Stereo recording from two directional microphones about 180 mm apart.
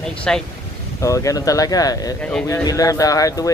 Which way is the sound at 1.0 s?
20° left (ahead or behind).